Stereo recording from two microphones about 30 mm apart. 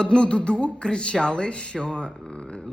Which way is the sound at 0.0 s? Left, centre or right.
Left.